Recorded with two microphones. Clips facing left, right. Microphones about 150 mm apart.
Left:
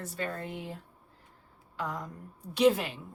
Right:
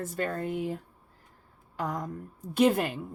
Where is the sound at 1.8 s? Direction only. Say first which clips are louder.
Right 4 dB; 45° right (ahead or behind).